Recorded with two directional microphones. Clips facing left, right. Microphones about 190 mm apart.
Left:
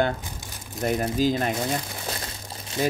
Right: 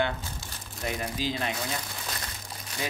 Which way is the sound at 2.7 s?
25° left (ahead or behind).